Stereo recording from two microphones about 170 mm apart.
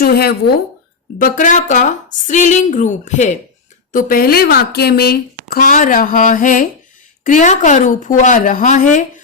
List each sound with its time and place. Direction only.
0.0 s speech: 65° left (ahead or behind)
1.2 s speech: 50° left (ahead or behind)
3.9 s a woman's voice: 60° left (ahead or behind)